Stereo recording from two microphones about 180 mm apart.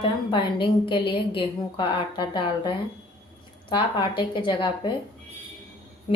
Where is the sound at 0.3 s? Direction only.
25° left (ahead or behind).